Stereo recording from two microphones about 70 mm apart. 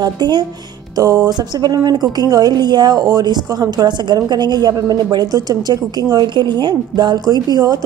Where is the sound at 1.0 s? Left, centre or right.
Right.